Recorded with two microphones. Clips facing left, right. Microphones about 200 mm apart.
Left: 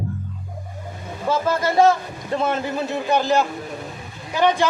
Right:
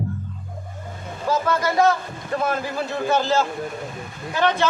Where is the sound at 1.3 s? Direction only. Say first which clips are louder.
Left 1 dB; 25° left (ahead or behind).